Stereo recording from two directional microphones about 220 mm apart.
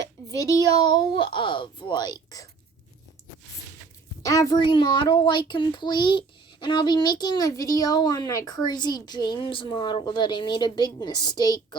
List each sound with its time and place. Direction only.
0.3 s a child's voice: 15° left (ahead or behind)
4.2 s a child's voice: 15° left (ahead or behind)